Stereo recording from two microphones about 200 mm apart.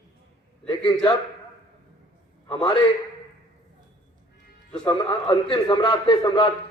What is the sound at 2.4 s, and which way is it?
Speech, 25° left (ahead or behind).